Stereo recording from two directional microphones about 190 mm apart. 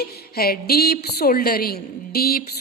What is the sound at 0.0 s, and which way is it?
A woman's voice, 55° left (ahead or behind).